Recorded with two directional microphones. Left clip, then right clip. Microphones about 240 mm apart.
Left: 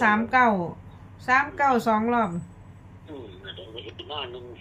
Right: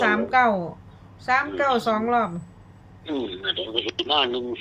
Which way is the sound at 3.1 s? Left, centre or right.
Right.